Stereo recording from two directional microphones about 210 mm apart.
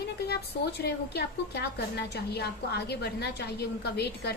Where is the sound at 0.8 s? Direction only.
50° left (ahead or behind).